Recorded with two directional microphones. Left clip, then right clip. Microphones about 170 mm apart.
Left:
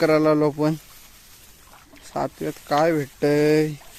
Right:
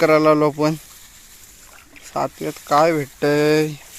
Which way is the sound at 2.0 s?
10° left (ahead or behind).